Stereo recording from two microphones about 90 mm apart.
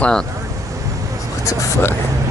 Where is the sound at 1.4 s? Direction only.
25° left (ahead or behind).